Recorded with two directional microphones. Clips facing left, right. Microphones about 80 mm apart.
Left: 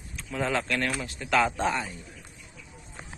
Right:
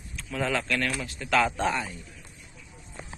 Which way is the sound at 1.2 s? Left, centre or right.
Centre.